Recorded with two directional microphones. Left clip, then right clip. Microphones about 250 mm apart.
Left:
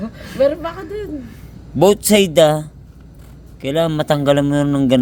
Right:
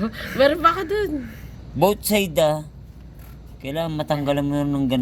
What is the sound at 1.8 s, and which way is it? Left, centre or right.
A man's voice, left.